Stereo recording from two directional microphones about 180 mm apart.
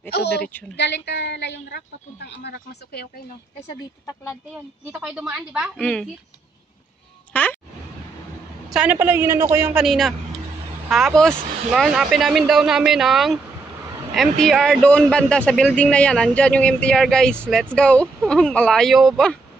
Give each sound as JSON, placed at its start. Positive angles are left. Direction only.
{"t": 0.1, "sound": "a woman's voice", "side_deg": 65}
{"t": 4.9, "sound": "a man's voice", "side_deg": -10}
{"t": 5.8, "sound": "speech", "side_deg": 5}
{"t": 7.3, "sound": "speech", "side_deg": 10}
{"t": 8.6, "sound": "a man's voice", "side_deg": -5}